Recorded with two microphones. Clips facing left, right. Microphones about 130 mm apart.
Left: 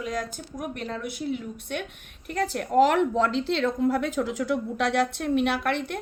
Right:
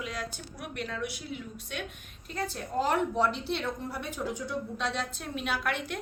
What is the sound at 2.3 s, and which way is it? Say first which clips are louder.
A woman's voice: left 9 dB; 75° left (ahead or behind).